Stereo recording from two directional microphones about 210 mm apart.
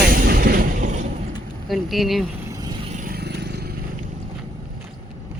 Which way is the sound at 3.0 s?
50° right (ahead or behind).